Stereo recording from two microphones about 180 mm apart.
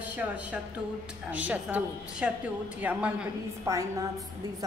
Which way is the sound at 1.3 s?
10° right (ahead or behind).